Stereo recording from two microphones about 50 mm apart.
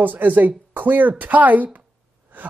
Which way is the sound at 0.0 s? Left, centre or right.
Right.